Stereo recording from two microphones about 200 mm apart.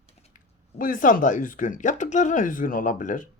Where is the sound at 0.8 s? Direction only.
40° left (ahead or behind).